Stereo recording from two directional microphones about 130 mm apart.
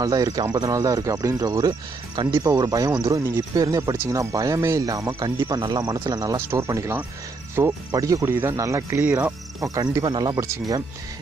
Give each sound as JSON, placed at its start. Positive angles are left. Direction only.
{"t": 0.0, "sound": "speech", "side_deg": -30}
{"t": 9.6, "sound": "speech", "side_deg": -30}